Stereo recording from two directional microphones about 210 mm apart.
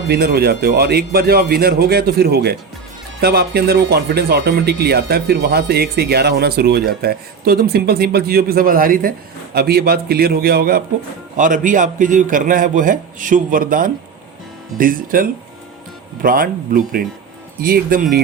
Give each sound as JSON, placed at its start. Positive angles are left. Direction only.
{"t": 0.1, "sound": "a man's voice", "side_deg": -50}